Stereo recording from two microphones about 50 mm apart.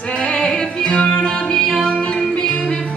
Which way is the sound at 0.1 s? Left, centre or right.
Left.